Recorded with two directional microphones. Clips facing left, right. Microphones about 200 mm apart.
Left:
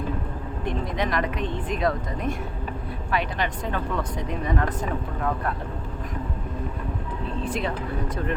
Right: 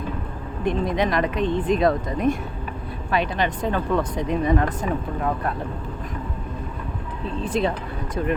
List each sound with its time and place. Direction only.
0.6 s speech: 15° right (ahead or behind)
7.4 s speech: 20° right (ahead or behind)